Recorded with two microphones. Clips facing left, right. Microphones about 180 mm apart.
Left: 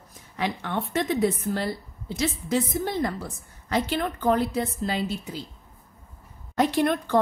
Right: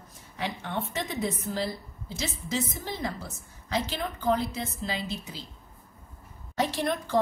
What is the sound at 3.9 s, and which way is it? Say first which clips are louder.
A woman's voice: left 4 dB; 50° left (ahead or behind).